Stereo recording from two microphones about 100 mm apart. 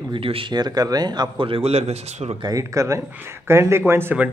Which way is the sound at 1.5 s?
90° right.